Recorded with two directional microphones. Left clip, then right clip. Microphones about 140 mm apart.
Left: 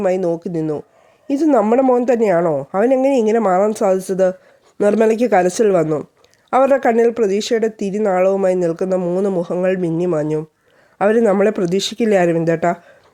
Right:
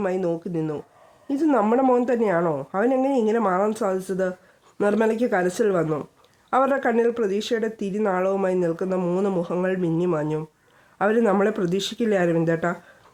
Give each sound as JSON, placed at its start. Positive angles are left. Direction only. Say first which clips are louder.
{"t": 0.0, "sound": "a woman's voice", "louder": "left 7 dB", "side_deg": 35}
{"t": 2.4, "sound": "speech", "louder": "left 7 dB", "side_deg": 25}
{"t": 2.7, "sound": "a woman's voice", "louder": "left 7 dB", "side_deg": 35}
{"t": 9.0, "sound": "a woman's voice", "louder": "left 6 dB", "side_deg": 20}